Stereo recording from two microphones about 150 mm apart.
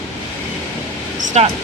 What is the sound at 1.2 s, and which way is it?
Vehicle, 50° right (ahead or behind).